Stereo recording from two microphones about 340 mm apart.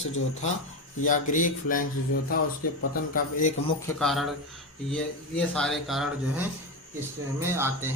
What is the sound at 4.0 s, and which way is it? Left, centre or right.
Speech, centre.